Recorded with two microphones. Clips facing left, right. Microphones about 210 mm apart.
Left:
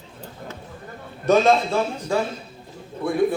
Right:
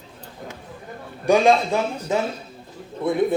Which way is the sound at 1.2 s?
15° right (ahead or behind).